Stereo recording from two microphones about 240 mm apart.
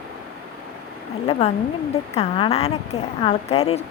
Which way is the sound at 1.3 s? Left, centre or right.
Left.